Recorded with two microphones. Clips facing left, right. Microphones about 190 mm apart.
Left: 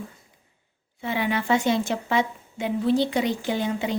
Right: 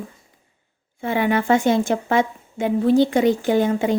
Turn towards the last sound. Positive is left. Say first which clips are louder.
# right 7 dB
turn(degrees=-50)  # may be behind; listen again after turning